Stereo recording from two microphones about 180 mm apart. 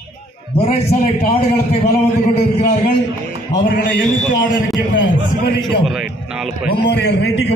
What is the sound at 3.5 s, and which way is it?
Speech, 75° left (ahead or behind).